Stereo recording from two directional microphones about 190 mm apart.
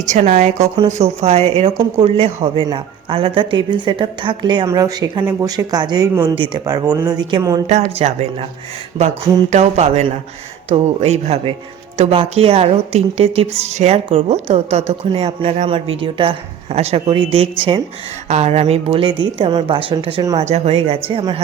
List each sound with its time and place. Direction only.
0.1 s a woman's voice: 40° right (ahead or behind); by 7.6 s 20° right (ahead or behind)
7.9 s a woman's voice: 30° right (ahead or behind)
9.5 s a woman's voice: 35° right (ahead or behind)